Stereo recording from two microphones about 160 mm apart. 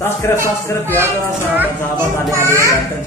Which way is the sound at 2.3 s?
15° right (ahead or behind).